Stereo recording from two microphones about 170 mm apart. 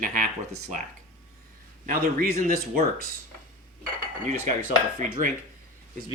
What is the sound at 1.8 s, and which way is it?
Speech, 55° right (ahead or behind).